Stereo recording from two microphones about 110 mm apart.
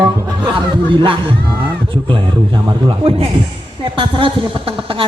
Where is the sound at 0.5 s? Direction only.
50° right (ahead or behind).